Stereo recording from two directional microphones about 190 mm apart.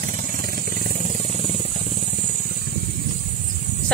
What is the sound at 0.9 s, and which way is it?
Vehicle, 30° right (ahead or behind).